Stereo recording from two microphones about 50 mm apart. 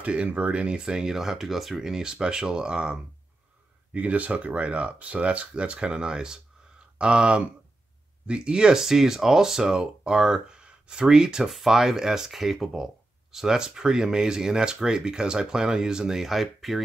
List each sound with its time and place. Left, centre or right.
0.0 s speech: right
3.9 s speech: right; by 16.8 s centre